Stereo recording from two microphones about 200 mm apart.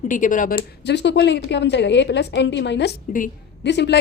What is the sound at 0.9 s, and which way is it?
A woman's voice, 60° left (ahead or behind).